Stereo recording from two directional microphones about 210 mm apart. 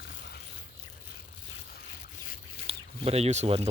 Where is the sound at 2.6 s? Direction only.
30° right (ahead or behind).